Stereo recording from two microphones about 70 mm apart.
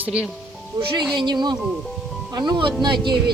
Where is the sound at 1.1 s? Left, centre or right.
Right.